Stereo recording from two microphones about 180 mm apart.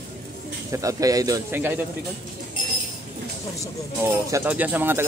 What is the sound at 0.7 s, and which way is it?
A man's voice, 20° right (ahead or behind).